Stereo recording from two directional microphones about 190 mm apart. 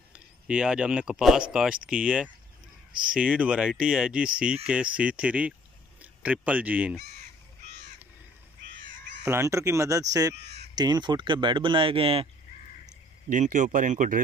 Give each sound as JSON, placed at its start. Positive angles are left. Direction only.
{"t": 0.1, "sound": "speech", "side_deg": -5}
{"t": 9.2, "sound": "speech", "side_deg": -15}
{"t": 13.3, "sound": "speech", "side_deg": -45}